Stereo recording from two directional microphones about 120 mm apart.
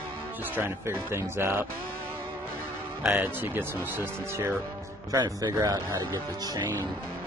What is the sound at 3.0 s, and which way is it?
Speech, 15° right (ahead or behind).